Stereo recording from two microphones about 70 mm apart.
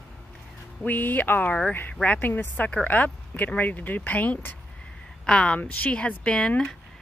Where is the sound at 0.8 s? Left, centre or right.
Left.